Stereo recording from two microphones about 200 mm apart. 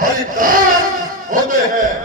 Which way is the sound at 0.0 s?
45° right (ahead or behind).